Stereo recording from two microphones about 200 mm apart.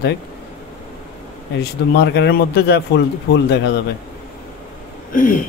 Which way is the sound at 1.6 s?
55° left (ahead or behind).